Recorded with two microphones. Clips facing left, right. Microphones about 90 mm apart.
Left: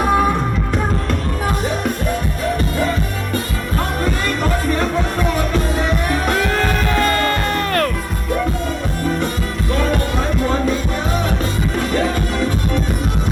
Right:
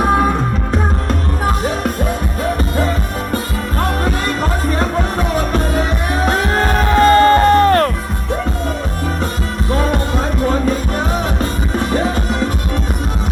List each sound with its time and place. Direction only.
6.1 s music: 30° right (ahead or behind)